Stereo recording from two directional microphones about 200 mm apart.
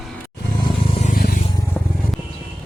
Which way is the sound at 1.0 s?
45° left (ahead or behind).